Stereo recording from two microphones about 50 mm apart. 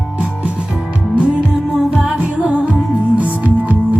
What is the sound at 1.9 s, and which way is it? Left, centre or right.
Music, centre.